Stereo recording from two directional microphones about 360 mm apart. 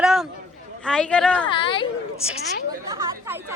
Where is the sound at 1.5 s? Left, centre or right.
Centre.